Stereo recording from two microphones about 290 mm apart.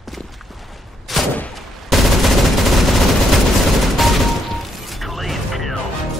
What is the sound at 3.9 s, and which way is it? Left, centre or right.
Music, centre.